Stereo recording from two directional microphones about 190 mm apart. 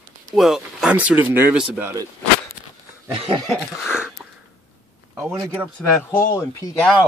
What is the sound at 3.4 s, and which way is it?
Cough, centre (ahead or behind).